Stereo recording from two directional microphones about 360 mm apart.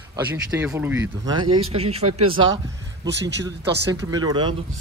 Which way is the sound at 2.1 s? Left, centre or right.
Right.